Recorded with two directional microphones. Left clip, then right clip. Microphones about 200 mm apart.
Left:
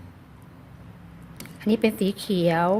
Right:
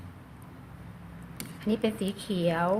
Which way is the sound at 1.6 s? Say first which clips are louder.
Left 7 dB; 40° left (ahead or behind).